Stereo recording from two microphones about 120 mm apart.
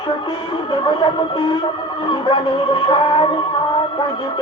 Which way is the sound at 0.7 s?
40° left (ahead or behind).